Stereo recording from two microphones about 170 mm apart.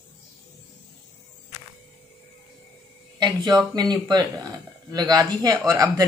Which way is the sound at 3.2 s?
25° right (ahead or behind).